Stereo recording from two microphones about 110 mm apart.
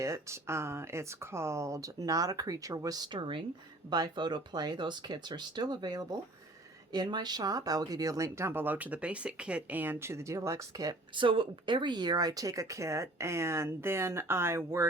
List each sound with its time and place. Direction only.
0.0 s speech: 25° right (ahead or behind)
11.1 s speech: 50° right (ahead or behind); by 14.8 s 25° right (ahead or behind)